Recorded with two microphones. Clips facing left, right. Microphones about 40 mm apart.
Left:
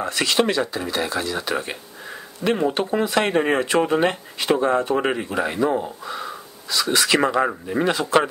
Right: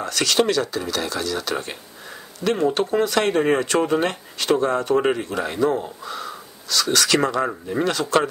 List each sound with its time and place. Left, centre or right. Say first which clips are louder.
0.0 s speech: even; centre